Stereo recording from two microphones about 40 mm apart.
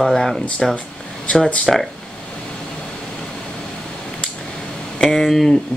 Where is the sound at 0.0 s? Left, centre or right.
Centre.